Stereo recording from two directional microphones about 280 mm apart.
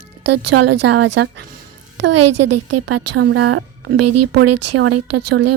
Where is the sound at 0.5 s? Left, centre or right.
Right.